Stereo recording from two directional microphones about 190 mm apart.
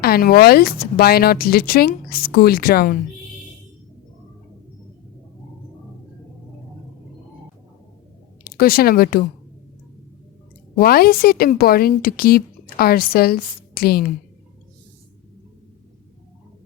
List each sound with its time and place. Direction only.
0.0 s a woman's voice: 55° left (ahead or behind)
8.5 s a woman's voice: 50° left (ahead or behind)
10.8 s a woman's voice: 55° left (ahead or behind)